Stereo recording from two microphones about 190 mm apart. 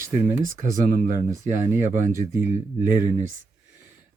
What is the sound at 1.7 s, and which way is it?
Speech, 10° right (ahead or behind).